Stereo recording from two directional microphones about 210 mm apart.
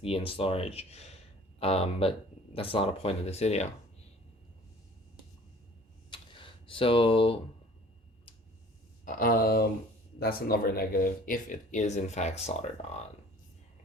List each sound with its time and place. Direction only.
0.3 s speech: 25° left (ahead or behind)
6.1 s a sound: 25° left (ahead or behind)
9.0 s speech: 40° left (ahead or behind)